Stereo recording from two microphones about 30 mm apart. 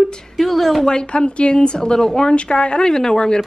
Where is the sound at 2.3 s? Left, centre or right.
Left.